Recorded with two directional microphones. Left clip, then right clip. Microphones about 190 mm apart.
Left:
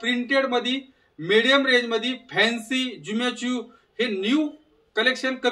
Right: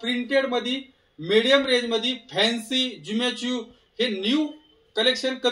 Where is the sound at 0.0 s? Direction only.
15° left (ahead or behind).